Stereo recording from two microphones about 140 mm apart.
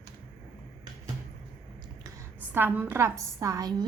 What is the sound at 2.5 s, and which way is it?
A woman's voice, 15° right (ahead or behind).